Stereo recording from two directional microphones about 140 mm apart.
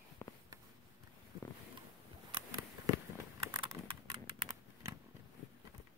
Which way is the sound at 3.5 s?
25° right (ahead or behind).